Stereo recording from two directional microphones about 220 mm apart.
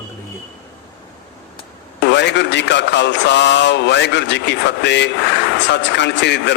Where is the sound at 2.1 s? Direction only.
50° left (ahead or behind).